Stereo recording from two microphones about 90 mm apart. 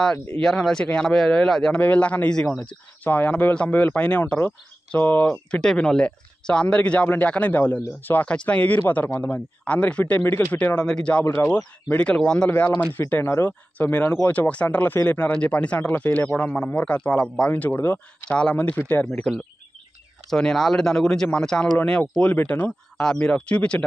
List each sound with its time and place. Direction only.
0.4 s speech: 5° left (ahead or behind)
4.4 s speech: 25° left (ahead or behind)
5.2 s speech: 10° left (ahead or behind)
12.4 s speech: 20° left (ahead or behind)
18.3 s speech: 10° left (ahead or behind)
19.0 s speech: 5° left (ahead or behind)